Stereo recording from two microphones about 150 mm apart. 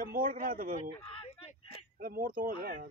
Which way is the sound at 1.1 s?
45° left (ahead or behind).